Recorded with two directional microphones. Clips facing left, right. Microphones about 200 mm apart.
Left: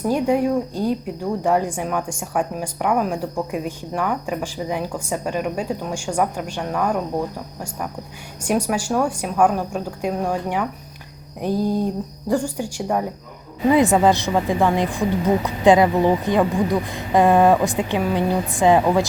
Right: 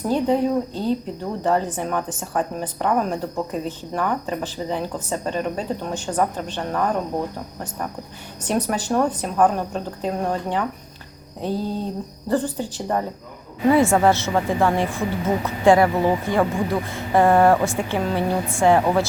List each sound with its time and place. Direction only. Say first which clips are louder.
0.1 s speech: left 1 dB; 10° left (ahead or behind)
8.4 s speech: left 2 dB; 10° left (ahead or behind)